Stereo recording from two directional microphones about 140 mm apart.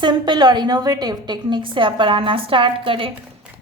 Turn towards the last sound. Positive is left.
turn(degrees=-40)  # may be behind; listen again after turning